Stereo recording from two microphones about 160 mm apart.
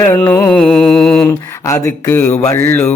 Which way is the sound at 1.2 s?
20° left (ahead or behind).